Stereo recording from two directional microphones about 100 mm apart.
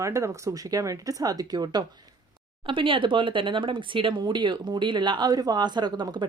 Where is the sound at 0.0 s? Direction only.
30° right (ahead or behind).